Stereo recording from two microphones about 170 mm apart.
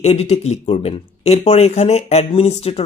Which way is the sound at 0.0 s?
40° left (ahead or behind).